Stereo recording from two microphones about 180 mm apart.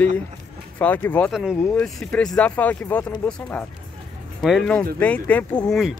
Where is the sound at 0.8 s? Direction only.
10° left (ahead or behind).